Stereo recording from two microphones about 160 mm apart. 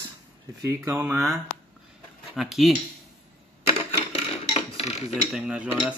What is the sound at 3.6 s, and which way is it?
Typewriter, 40° left (ahead or behind).